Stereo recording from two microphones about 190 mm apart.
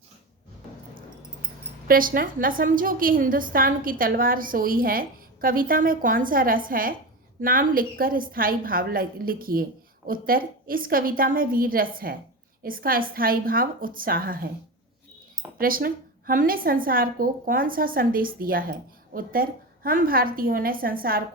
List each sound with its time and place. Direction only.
1.9 s a woman's voice: 50° right (ahead or behind)
15.5 s a woman's voice: 50° right (ahead or behind)